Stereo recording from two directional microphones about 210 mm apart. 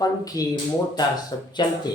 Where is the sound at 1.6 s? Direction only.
20° left (ahead or behind).